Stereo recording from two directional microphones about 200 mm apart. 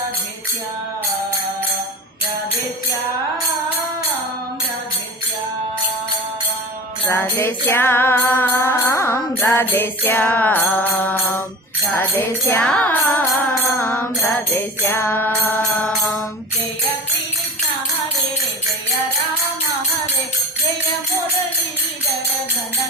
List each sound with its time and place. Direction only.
7.1 s music: 15° left (ahead or behind)